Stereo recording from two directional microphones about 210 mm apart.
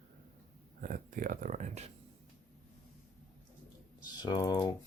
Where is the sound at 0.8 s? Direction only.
40° right (ahead or behind).